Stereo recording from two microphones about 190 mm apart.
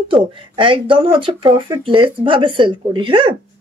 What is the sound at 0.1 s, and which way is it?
A woman's voice, 25° right (ahead or behind).